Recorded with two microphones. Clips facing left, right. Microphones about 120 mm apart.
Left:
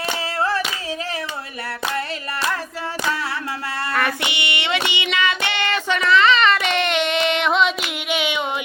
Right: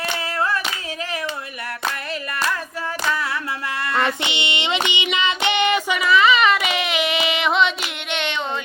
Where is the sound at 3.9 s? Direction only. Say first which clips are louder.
Right 1 dB; 25° right (ahead or behind).